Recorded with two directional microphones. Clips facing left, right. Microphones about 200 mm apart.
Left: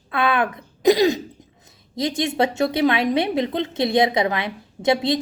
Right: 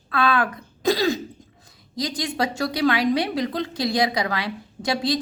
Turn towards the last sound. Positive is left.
turn(degrees=25)  # may be behind; listen again after turning